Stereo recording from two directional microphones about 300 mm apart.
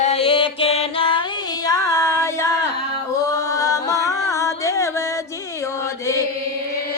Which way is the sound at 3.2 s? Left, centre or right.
Centre.